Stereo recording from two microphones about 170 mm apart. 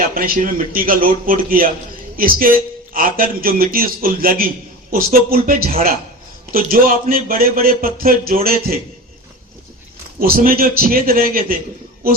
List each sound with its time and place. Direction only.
0.1 s a man's voice: 55° right (ahead or behind)
10.2 s a man's voice: 60° right (ahead or behind)